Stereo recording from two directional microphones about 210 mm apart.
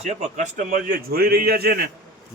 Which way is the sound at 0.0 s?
35° right (ahead or behind).